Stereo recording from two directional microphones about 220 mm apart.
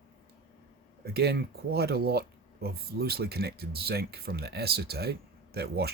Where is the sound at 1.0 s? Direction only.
45° right (ahead or behind).